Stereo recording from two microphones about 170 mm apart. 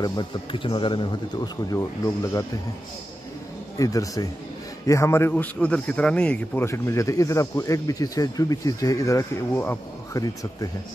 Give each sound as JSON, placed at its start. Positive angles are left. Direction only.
{"t": 0.0, "sound": "speech", "side_deg": 25}
{"t": 3.7, "sound": "a man's voice", "side_deg": 20}